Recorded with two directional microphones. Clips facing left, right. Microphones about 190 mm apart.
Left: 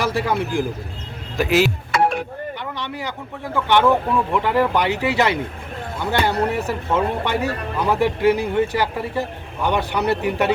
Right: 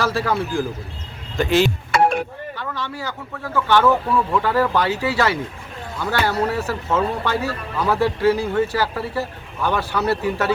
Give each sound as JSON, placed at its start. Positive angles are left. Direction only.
{"t": 0.0, "sound": "speech", "side_deg": 15}
{"t": 1.4, "sound": "speech", "side_deg": 5}
{"t": 2.6, "sound": "speech", "side_deg": 15}